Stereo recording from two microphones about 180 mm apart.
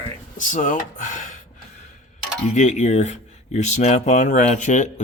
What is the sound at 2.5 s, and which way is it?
Speech, 40° left (ahead or behind).